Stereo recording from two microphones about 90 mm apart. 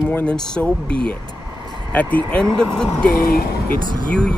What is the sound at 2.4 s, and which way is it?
Speech, 5° left (ahead or behind).